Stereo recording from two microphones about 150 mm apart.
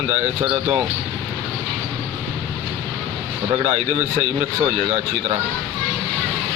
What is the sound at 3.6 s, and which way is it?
Speech, 50° right (ahead or behind).